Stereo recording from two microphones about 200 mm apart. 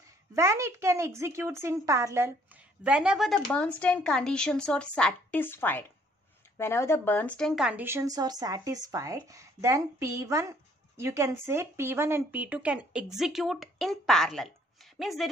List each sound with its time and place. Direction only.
0.3 s speech: 15° right (ahead or behind)